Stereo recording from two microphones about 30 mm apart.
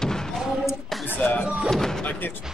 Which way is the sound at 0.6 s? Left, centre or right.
Centre.